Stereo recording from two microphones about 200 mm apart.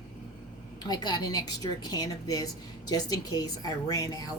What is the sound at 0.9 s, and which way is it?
A woman's voice, 20° left (ahead or behind).